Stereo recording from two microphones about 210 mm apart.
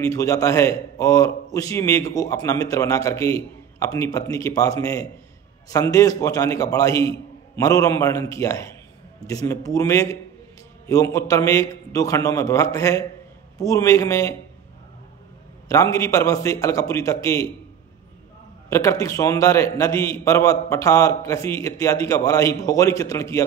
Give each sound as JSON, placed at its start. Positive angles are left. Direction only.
{"t": 0.0, "sound": "a man's voice", "side_deg": 15}
{"t": 15.7, "sound": "a man's voice", "side_deg": 15}
{"t": 18.7, "sound": "a man's voice", "side_deg": 15}